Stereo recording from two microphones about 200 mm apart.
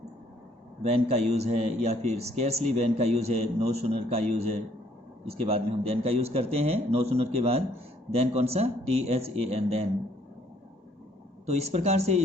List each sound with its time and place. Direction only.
0.8 s a man's voice: 35° right (ahead or behind)
5.5 s a man's voice: 30° right (ahead or behind)
11.4 s a man's voice: 35° right (ahead or behind)